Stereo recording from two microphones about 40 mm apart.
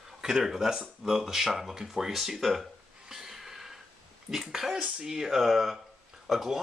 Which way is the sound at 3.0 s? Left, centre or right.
Centre.